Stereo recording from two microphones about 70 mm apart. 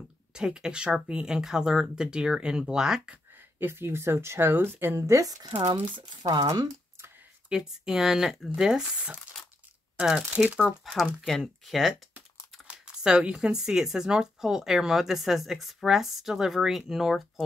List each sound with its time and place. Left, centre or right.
0.3 s speech: centre
3.5 s speech: right
5.2 s speech: right
6.2 s speech: right
7.4 s speech: centre
9.3 s a sound: centre
9.9 s speech: centre
11.0 s speech: centre
12.6 s speech: centre